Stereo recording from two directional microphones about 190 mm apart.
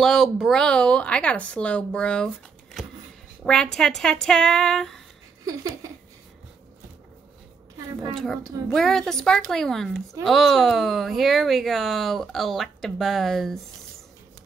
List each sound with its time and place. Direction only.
0.0 s speech: centre (ahead or behind)
5.4 s a sound: 20° right (ahead or behind)
8.1 s speech: centre (ahead or behind)